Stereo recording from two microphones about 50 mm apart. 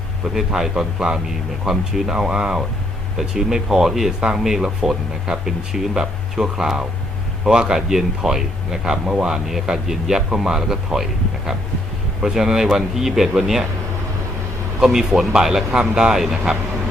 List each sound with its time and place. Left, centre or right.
0.3 s speech: centre
14.8 s speech: centre